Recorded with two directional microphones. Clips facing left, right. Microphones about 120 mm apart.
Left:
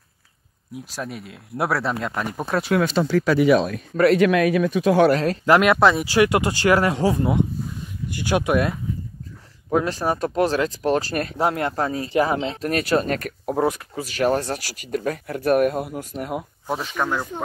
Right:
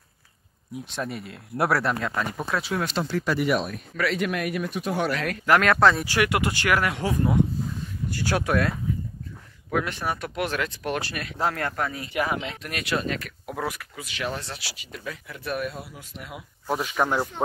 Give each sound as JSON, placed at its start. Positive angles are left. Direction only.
{"t": 0.7, "sound": "speech", "side_deg": 0}
{"t": 2.6, "sound": "speech", "side_deg": 80}
{"t": 3.9, "sound": "speech", "side_deg": 45}
{"t": 4.2, "sound": "speech", "side_deg": 90}
{"t": 5.1, "sound": "speech", "side_deg": 30}
{"t": 8.1, "sound": "speech", "side_deg": 20}
{"t": 9.7, "sound": "speech", "side_deg": 30}
{"t": 11.3, "sound": "speech", "side_deg": 20}
{"t": 13.6, "sound": "speech", "side_deg": 30}
{"t": 16.7, "sound": "speech", "side_deg": -5}